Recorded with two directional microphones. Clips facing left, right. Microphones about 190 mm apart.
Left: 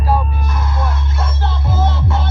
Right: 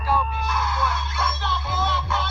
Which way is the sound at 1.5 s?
70° right (ahead or behind).